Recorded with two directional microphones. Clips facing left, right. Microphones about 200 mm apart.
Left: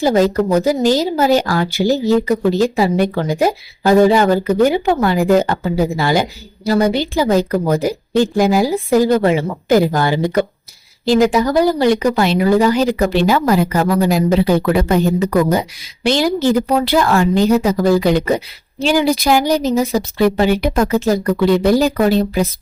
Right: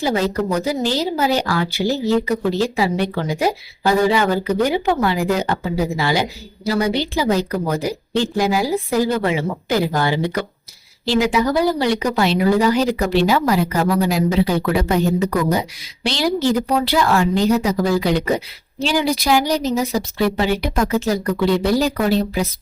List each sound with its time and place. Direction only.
0.0 s speech: 45° left (ahead or behind)
16.0 s speech: 50° left (ahead or behind)